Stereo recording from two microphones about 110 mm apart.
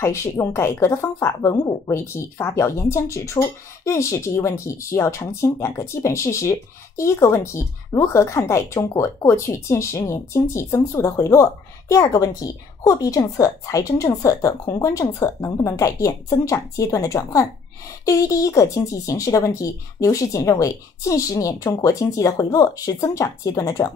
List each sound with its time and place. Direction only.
0.0 s a woman's voice: 25° left (ahead or behind)